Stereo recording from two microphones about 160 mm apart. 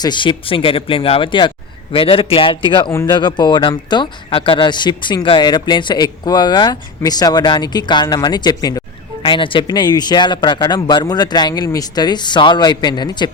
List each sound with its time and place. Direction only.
0.0 s speech: 30° left (ahead or behind)
2.9 s speech: 15° left (ahead or behind)
3.2 s speech: 30° left (ahead or behind)